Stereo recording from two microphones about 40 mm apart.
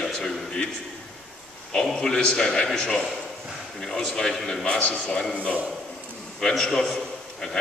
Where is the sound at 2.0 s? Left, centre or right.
Centre.